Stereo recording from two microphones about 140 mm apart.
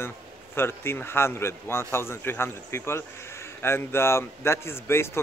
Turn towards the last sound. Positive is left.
turn(degrees=20)  # may be behind; listen again after turning